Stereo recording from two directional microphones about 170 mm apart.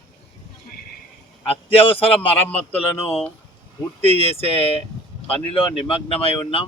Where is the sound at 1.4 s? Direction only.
35° left (ahead or behind).